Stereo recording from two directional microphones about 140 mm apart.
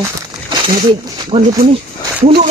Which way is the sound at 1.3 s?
40° right (ahead or behind).